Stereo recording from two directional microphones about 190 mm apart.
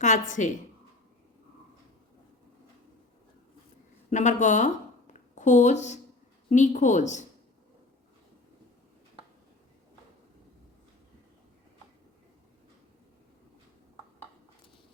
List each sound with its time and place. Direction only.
0.0 s a woman's voice: 40° left (ahead or behind)
4.1 s a woman's voice: 40° left (ahead or behind)